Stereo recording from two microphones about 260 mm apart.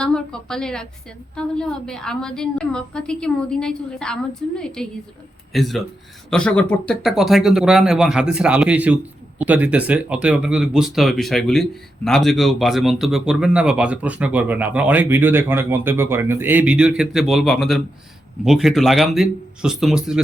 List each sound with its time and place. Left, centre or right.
0.0 s speech: centre